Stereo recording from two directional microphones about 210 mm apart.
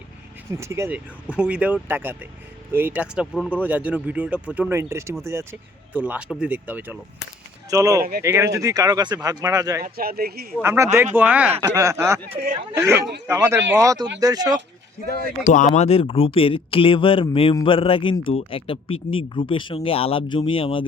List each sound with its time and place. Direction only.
0.5 s speech: 15° right (ahead or behind)
9.8 s speech: 45° right (ahead or behind)
10.6 s speech: 10° right (ahead or behind)
13.0 s speech: 55° right (ahead or behind)
13.2 s speech: 15° right (ahead or behind)
15.7 s speech: 30° left (ahead or behind)